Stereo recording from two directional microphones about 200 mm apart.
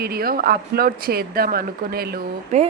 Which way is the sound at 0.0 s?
50° right (ahead or behind).